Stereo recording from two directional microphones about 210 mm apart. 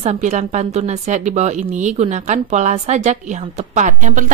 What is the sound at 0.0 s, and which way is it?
A woman's voice, 35° right (ahead or behind).